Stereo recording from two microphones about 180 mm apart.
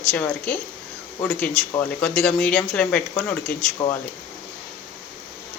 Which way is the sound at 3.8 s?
20° left (ahead or behind).